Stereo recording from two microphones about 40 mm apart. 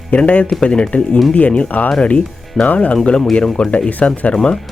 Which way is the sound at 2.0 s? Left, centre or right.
Left.